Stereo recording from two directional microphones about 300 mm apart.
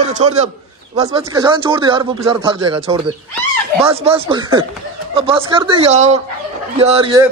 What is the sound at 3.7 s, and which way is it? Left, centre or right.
Speech, centre.